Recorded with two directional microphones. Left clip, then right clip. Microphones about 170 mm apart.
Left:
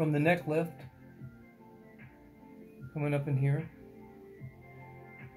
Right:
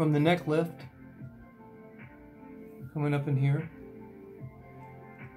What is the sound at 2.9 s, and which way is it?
Speech, 15° left (ahead or behind).